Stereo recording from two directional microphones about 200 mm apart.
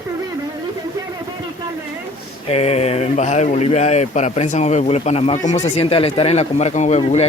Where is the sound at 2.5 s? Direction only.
30° left (ahead or behind).